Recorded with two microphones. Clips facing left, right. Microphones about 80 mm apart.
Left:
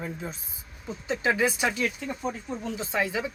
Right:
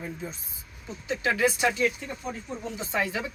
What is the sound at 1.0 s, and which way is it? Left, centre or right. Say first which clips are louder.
Speech: even; left.